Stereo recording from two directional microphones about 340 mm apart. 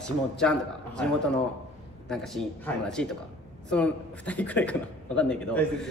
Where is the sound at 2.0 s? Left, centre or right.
Centre.